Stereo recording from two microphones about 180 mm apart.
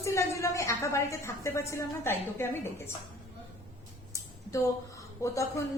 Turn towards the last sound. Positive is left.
turn(degrees=15)  # may be behind; listen again after turning